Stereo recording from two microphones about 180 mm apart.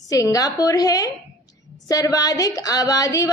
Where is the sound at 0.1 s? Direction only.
20° left (ahead or behind).